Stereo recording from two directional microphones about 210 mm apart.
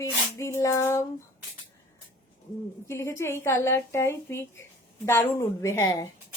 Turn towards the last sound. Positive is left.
turn(degrees=15)  # may be behind; listen again after turning